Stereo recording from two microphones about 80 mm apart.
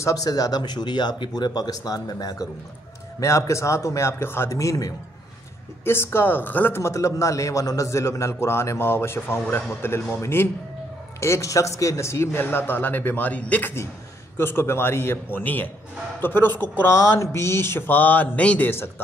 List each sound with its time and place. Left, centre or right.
0.0 s speech: left
3.2 s a man's voice: left
5.9 s a man's voice: left
16.9 s speech: left; by 18.7 s centre